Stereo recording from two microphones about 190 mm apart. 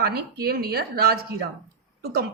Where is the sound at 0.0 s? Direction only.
55° right (ahead or behind).